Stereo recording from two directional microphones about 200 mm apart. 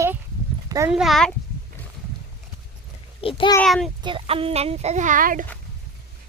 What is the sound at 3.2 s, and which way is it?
Speech, 25° left (ahead or behind).